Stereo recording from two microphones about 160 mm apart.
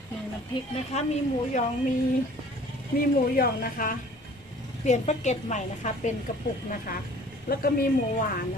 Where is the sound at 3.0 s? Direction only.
65° left (ahead or behind).